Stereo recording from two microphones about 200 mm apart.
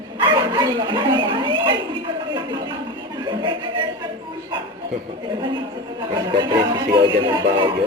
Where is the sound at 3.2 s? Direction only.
25° right (ahead or behind).